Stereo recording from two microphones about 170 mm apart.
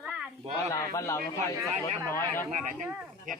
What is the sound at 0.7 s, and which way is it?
Speech, 20° left (ahead or behind).